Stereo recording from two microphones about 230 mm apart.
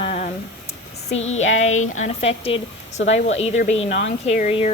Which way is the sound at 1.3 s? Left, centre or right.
Left.